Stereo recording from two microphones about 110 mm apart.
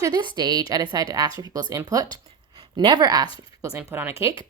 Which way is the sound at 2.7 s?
40° right (ahead or behind).